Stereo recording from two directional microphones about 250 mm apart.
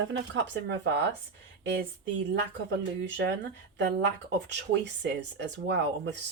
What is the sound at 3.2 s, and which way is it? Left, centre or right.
Speech, right.